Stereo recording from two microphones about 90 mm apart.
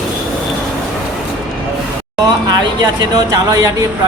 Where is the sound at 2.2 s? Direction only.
50° right (ahead or behind).